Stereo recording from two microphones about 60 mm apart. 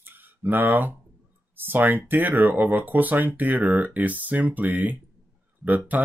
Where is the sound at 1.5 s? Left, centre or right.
Right.